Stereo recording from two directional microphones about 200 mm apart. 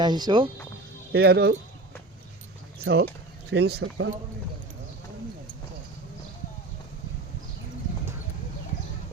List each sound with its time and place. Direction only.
0.0 s speech: 20° right (ahead or behind)
1.1 s speech: 55° right (ahead or behind)
2.7 s speech: 55° right (ahead or behind)